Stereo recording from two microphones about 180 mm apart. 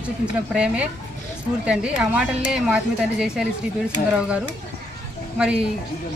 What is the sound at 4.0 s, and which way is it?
Speech, 40° left (ahead or behind).